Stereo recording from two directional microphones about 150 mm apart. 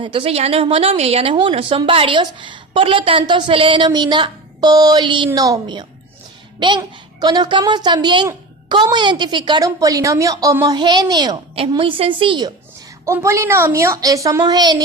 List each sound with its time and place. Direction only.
0.0 s a woman's voice: 35° right (ahead or behind)
13.1 s a woman's voice: 20° right (ahead or behind)